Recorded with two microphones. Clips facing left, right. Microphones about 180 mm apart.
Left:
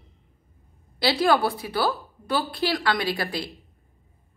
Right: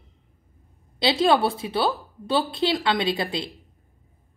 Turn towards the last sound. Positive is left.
turn(degrees=-20)  # may be behind; listen again after turning